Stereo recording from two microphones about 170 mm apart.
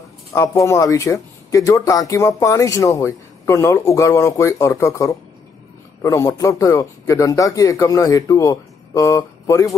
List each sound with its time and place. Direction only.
0.3 s speech: 15° left (ahead or behind)